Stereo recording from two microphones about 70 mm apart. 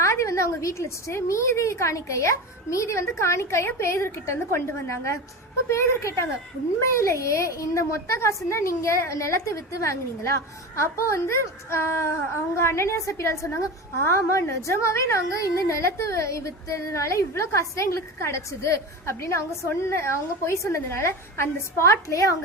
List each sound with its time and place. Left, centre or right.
0.0 s a woman's voice: left